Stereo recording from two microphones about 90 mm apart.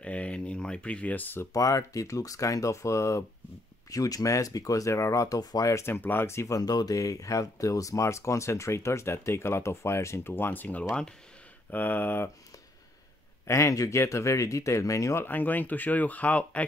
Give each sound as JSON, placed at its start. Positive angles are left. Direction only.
{"t": 0.0, "sound": "speech", "side_deg": 15}
{"t": 1.5, "sound": "speech", "side_deg": 40}
{"t": 5.9, "sound": "speech", "side_deg": 20}
{"t": 13.5, "sound": "speech", "side_deg": 35}
{"t": 15.2, "sound": "speech", "side_deg": 20}